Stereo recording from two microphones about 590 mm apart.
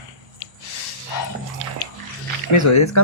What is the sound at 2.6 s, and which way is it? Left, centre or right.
Speech, left.